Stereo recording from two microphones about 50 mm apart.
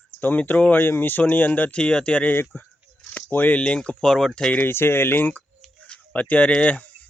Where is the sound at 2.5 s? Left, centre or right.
Left.